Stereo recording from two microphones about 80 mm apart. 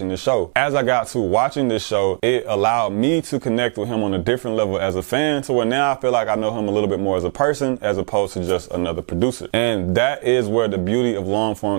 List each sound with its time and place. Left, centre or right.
0.2 s speech: centre